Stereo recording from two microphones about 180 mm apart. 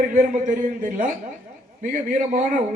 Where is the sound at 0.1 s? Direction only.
45° right (ahead or behind).